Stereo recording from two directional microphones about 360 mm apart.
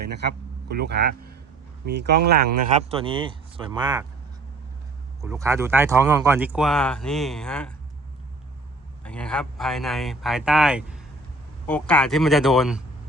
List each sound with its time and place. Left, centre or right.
0.0 s speech: right
2.9 s speech: centre
5.2 s speech: centre
9.0 s speech: centre